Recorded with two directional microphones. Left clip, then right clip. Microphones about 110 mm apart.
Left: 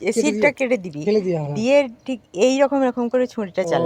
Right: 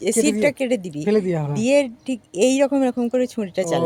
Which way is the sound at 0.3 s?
30° right (ahead or behind).